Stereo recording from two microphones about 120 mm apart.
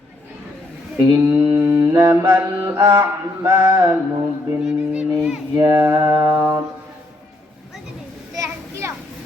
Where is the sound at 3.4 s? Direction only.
20° right (ahead or behind).